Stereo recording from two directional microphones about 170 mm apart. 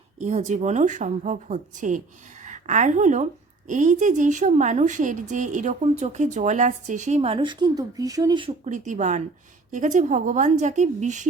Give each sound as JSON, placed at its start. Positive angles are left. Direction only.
{"t": 0.2, "sound": "a woman's voice", "side_deg": -45}
{"t": 8.6, "sound": "a woman's voice", "side_deg": -45}